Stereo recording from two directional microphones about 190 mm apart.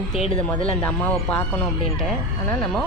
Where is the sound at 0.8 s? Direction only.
10° left (ahead or behind).